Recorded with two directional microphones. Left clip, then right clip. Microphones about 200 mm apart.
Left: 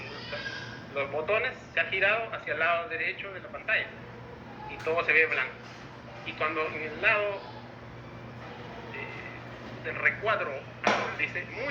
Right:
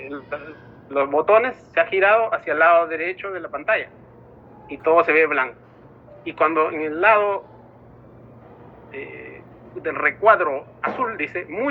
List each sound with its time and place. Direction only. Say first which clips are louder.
0.9 s a man's voice: right 12 dB; 30° right (ahead or behind)
9.8 s a man's voice: right 11 dB; 30° right (ahead or behind)